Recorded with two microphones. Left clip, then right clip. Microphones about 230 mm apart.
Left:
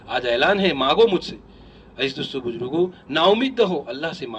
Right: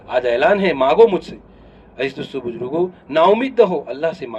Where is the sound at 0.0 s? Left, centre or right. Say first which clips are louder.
Right 4 dB; left.